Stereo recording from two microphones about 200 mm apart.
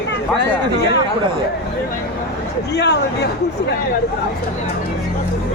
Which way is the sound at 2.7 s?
55° left (ahead or behind).